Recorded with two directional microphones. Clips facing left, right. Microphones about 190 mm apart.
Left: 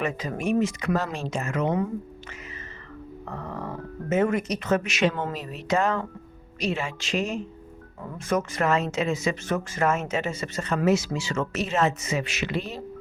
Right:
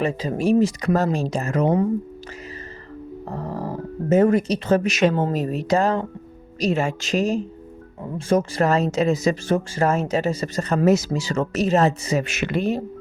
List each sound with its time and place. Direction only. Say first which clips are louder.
0.0 s speech: right 6 dB; 30° right (ahead or behind)
3.2 s speech: right 5 dB; 35° right (ahead or behind)
12.2 s speech: right 6 dB; 50° right (ahead or behind)